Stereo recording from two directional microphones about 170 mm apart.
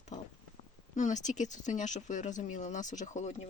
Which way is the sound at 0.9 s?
45° left (ahead or behind).